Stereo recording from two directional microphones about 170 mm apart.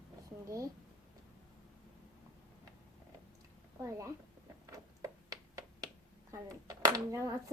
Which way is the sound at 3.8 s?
20° right (ahead or behind).